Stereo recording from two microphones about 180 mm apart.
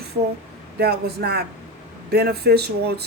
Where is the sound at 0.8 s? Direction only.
65° right (ahead or behind).